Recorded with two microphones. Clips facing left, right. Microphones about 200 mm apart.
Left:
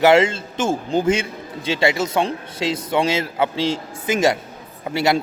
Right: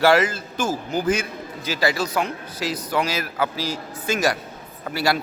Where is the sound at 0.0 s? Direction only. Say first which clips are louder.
Left 3 dB; 25° left (ahead or behind).